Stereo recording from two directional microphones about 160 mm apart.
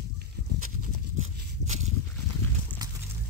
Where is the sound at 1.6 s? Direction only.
45° right (ahead or behind).